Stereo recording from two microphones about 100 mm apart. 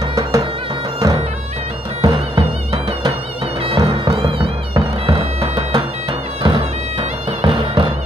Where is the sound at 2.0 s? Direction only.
45° right (ahead or behind).